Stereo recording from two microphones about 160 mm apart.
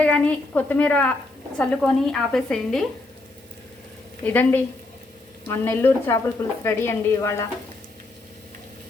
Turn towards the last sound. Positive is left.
turn(degrees=15)  # may be behind; listen again after turning